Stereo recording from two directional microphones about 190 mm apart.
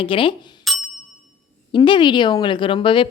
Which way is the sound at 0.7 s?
Centre (ahead or behind).